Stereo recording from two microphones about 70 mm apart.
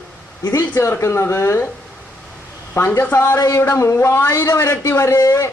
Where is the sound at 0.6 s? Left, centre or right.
Left.